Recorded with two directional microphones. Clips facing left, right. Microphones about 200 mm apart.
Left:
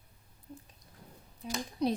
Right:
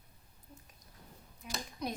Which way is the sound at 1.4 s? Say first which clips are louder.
Left 8 dB; 30° left (ahead or behind).